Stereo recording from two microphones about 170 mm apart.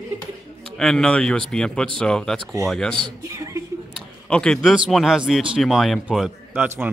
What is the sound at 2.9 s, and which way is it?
Speech, 25° right (ahead or behind).